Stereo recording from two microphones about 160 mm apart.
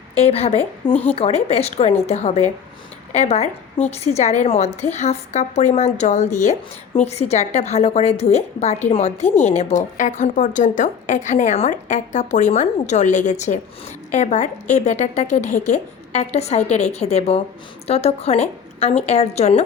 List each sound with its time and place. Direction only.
0.2 s a woman's voice: 40° left (ahead or behind)
9.2 s a woman's voice: 10° left (ahead or behind)
9.5 s a woman's voice: 40° left (ahead or behind)